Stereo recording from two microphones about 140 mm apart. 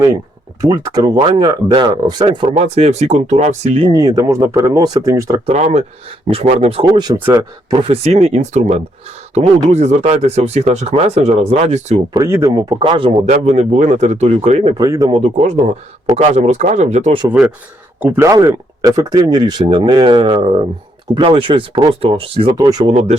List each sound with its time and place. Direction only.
0.6 s speech: 25° right (ahead or behind)
2.6 s speech: 50° right (ahead or behind)
3.8 s speech: 30° right (ahead or behind)
5.5 s speech: 50° right (ahead or behind); by 7.9 s 35° right (ahead or behind)
8.0 s speech: 50° right (ahead or behind)
12.2 s speech: 20° right (ahead or behind)
12.8 s speech: 35° right (ahead or behind)
13.2 s speech: 55° right (ahead or behind)
14.8 s speech: 25° right (ahead or behind)
15.2 s speech: 55° right (ahead or behind)
18.0 s speech: 20° right (ahead or behind)
22.9 s speech: 50° right (ahead or behind)